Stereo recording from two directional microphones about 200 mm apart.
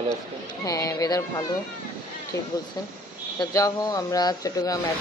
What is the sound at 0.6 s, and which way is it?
Speech, 20° left (ahead or behind).